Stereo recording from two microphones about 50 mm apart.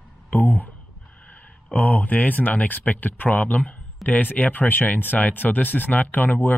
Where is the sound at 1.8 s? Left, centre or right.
Left.